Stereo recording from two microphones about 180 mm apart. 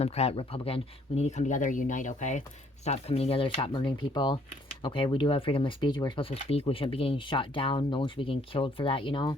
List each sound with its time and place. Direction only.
0.0 s speech: 35° left (ahead or behind)